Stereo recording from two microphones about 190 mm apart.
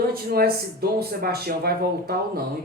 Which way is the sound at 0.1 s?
50° right (ahead or behind).